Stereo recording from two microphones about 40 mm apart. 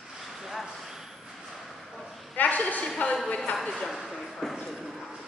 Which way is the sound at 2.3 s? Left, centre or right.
Left.